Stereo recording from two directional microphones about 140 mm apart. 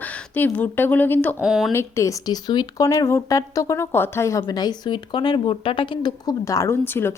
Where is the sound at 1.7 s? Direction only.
20° left (ahead or behind).